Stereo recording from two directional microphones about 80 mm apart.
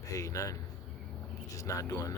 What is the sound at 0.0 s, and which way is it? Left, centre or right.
A man's voice, left.